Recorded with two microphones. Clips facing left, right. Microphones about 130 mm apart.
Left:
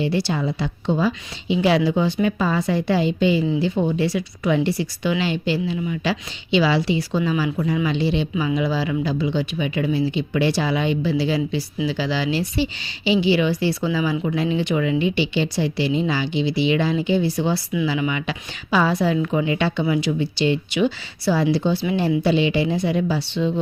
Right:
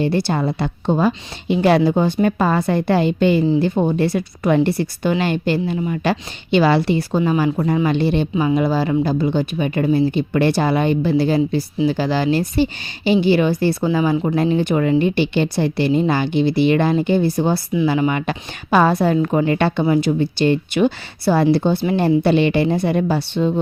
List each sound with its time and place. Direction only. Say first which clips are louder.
0.0 s a woman's voice: right 3 dB; 50° right (ahead or behind)
19.8 s a woman's voice: right 4 dB; 40° right (ahead or behind)